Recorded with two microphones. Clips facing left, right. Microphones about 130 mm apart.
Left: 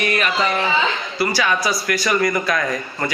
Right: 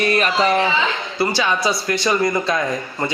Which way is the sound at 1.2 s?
25° right (ahead or behind).